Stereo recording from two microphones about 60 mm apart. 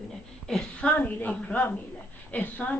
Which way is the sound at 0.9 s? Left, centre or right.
Left.